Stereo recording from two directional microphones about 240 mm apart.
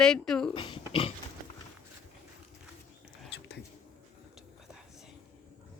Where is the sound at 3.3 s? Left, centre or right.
Left.